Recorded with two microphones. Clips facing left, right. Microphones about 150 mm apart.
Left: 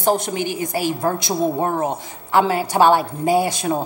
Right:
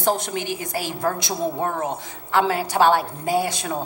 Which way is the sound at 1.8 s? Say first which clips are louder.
Left 4 dB; 5° left (ahead or behind).